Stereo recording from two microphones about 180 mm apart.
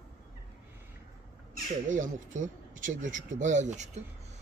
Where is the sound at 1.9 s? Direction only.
45° right (ahead or behind).